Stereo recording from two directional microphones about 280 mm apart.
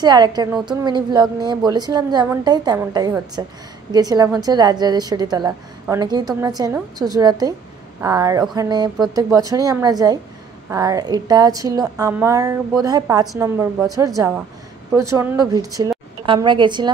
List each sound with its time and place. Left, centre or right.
0.0 s a woman's voice: centre